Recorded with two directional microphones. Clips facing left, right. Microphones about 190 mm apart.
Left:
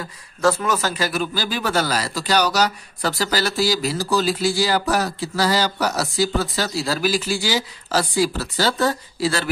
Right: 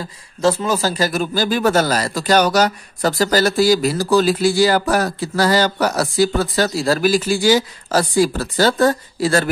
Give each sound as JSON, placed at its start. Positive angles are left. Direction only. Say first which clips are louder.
{"t": 0.0, "sound": "speech", "louder": "right 2 dB", "side_deg": -25}